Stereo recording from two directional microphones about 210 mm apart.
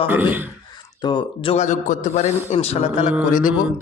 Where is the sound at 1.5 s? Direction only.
35° left (ahead or behind).